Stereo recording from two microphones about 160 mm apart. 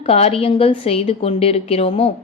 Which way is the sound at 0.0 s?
40° left (ahead or behind).